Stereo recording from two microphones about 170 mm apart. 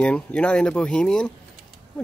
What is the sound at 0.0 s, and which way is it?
A woman's voice, 5° left (ahead or behind).